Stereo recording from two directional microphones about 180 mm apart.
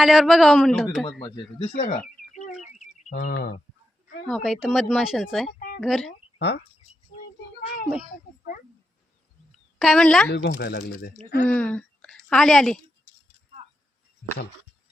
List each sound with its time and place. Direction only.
0.0 s speech: centre (ahead or behind)
1.2 s speech: 30° left (ahead or behind)
1.8 s a sound: 50° left (ahead or behind)
3.0 s speech: 40° left (ahead or behind)
4.3 s speech: centre (ahead or behind)
9.7 s speech: centre (ahead or behind)
10.2 s speech: 70° left (ahead or behind)
11.4 s a woman's voice: 5° left (ahead or behind)